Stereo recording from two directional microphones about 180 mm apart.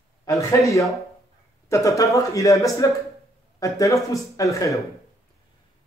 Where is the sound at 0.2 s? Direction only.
15° left (ahead or behind).